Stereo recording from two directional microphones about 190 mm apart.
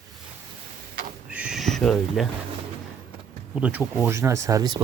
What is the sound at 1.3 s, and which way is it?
Speech, 5° right (ahead or behind).